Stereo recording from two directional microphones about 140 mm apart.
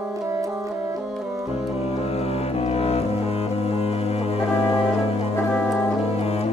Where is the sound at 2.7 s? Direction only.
45° left (ahead or behind).